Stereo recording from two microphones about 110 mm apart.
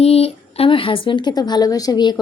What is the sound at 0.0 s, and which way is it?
A woman's voice, 70° left (ahead or behind).